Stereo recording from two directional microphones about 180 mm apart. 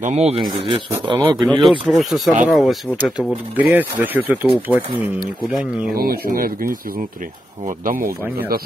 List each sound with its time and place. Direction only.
0.0 s speech: 40° right (ahead or behind)
0.4 s speech: 25° right (ahead or behind)
1.4 s speech: centre (ahead or behind)
5.9 s speech: 55° right (ahead or behind)